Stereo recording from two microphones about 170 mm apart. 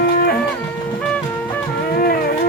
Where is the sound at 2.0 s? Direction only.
65° left (ahead or behind).